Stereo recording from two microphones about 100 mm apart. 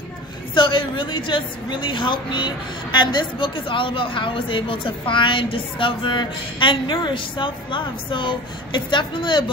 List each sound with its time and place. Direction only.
0.6 s a woman's voice: 55° left (ahead or behind)